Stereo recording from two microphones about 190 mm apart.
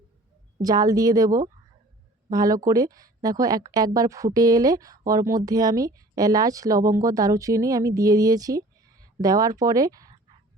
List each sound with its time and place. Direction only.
0.6 s speech: 20° right (ahead or behind)